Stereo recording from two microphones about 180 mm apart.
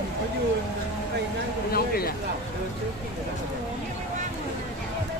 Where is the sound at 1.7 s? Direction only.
55° left (ahead or behind).